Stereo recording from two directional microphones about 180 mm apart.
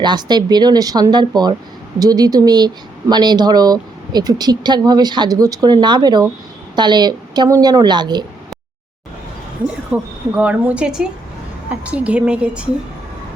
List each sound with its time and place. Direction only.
0.0 s speech: 25° right (ahead or behind)
9.9 s a woman's voice: 10° right (ahead or behind)